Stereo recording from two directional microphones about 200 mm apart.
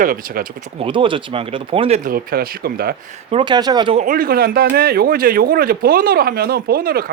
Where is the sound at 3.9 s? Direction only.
40° right (ahead or behind).